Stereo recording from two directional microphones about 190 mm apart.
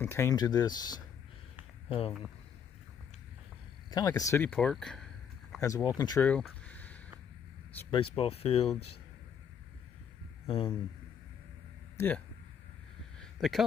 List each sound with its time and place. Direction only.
0.0 s speech: 15° left (ahead or behind); by 2.1 s 30° left (ahead or behind)
3.9 s speech: 20° left (ahead or behind); by 5.0 s 5° left (ahead or behind)
5.6 s speech: 15° left (ahead or behind)
6.2 s a sound: 5° left (ahead or behind)
7.9 s speech: 25° left (ahead or behind)
10.4 s speech: 30° left (ahead or behind)
13.2 s a sound: centre (ahead or behind)